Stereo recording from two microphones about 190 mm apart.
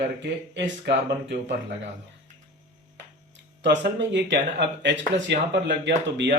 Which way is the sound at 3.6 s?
65° right (ahead or behind).